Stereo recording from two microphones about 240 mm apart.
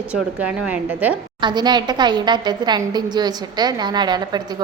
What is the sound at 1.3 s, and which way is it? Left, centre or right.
A woman's voice, centre.